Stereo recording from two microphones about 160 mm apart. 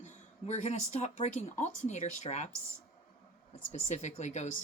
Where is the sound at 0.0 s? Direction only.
45° left (ahead or behind).